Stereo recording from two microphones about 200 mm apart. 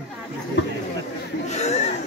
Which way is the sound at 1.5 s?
35° left (ahead or behind).